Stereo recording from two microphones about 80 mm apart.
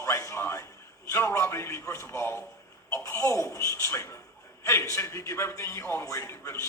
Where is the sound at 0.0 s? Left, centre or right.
Left.